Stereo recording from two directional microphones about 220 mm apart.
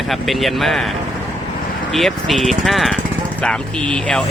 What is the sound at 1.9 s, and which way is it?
Speech, centre (ahead or behind).